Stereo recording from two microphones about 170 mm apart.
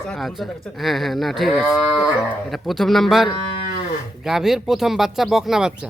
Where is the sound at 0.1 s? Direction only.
Centre (ahead or behind).